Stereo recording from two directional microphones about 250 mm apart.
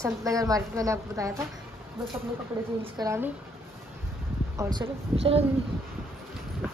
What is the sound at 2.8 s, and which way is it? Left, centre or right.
Speech, centre.